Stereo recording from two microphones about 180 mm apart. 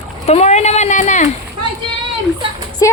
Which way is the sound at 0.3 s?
35° left (ahead or behind).